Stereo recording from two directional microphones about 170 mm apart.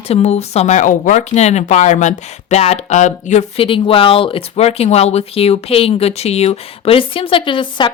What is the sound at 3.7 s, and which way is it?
Speech, 30° left (ahead or behind).